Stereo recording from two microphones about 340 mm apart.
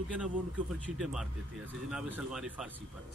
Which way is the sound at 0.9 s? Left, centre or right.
Centre.